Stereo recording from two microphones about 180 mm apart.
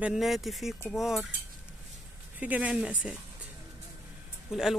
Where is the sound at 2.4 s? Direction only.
10° right (ahead or behind).